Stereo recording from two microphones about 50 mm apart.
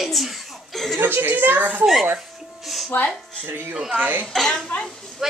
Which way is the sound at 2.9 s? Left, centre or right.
Left.